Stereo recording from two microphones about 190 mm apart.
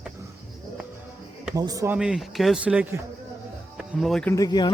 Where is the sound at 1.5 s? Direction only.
20° right (ahead or behind).